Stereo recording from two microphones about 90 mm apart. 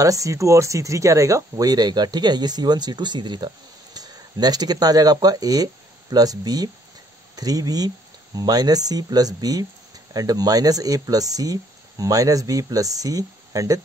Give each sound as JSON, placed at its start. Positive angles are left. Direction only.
{"t": 0.0, "sound": "speech", "side_deg": -40}